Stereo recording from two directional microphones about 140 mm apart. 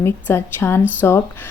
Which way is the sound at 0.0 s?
15° left (ahead or behind).